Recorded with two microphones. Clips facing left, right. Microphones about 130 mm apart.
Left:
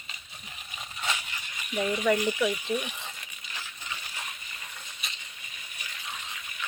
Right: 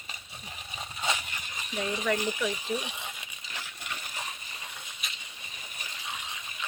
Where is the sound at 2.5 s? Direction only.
30° right (ahead or behind).